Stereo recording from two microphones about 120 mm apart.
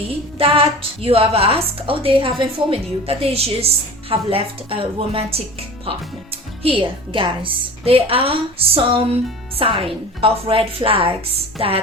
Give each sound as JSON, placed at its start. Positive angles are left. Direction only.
{"t": 0.3, "sound": "speech", "side_deg": -50}